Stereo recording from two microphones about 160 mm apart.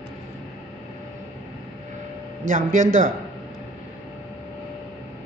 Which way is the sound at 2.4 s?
55° right (ahead or behind).